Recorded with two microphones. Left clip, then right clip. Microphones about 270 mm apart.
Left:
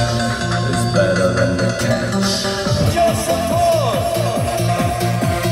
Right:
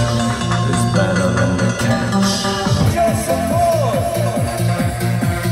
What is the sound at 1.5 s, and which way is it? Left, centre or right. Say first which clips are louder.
Music: left 1 dB; right.